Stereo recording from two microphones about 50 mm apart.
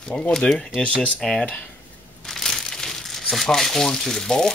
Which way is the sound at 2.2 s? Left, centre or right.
Centre.